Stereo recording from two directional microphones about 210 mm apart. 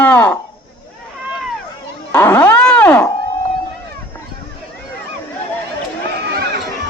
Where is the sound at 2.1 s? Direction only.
10° left (ahead or behind).